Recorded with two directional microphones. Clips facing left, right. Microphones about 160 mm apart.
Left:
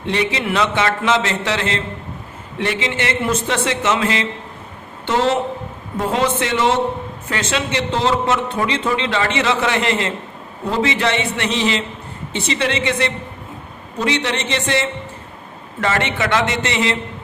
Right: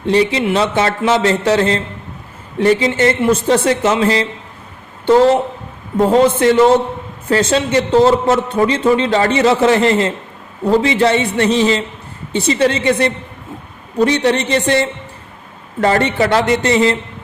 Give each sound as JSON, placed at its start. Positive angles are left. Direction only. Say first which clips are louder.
{"t": 0.0, "sound": "speech", "louder": "right 7 dB", "side_deg": -35}
{"t": 6.1, "sound": "speech", "louder": "right 8 dB", "side_deg": -35}